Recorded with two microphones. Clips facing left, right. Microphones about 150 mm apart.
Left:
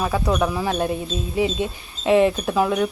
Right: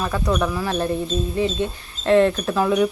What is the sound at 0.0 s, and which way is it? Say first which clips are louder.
Speech: left 1 dB; 10° left (ahead or behind).